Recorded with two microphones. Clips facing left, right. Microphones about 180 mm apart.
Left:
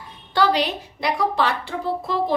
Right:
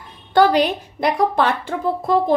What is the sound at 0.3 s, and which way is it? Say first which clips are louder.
A woman's voice: right 5 dB; 50° right (ahead or behind).